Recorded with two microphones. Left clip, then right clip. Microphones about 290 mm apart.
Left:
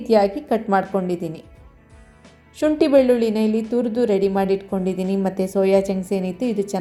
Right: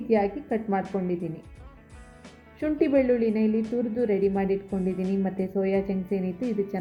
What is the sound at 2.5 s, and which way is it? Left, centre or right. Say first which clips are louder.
A woman's voice: left 8 dB; centre.